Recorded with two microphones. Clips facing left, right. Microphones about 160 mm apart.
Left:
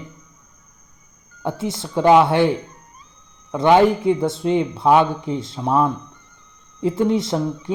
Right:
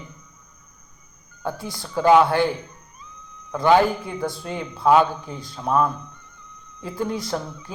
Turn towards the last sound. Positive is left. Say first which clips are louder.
# left 6 dB
turn(degrees=25)  # may be behind; listen again after turning